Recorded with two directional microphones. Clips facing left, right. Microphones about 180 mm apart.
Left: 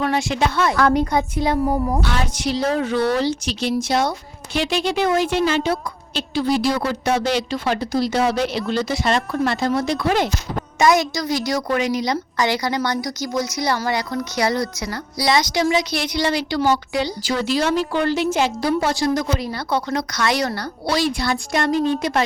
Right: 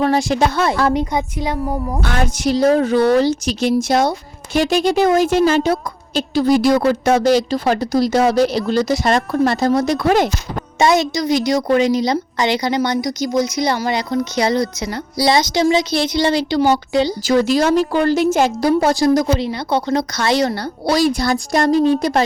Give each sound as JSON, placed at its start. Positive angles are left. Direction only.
{"t": 0.0, "sound": "speech", "side_deg": -35}
{"t": 0.9, "sound": "a woman's voice", "side_deg": -15}
{"t": 1.6, "sound": "a woman's voice", "side_deg": 5}
{"t": 2.0, "sound": "a woman's voice", "side_deg": -50}
{"t": 10.8, "sound": "a woman's voice", "side_deg": -25}
{"t": 17.2, "sound": "a woman's voice", "side_deg": -45}
{"t": 19.5, "sound": "a woman's voice", "side_deg": -20}
{"t": 20.8, "sound": "speech", "side_deg": -40}